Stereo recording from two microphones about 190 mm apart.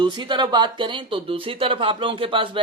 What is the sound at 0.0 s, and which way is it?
Speech, 25° right (ahead or behind).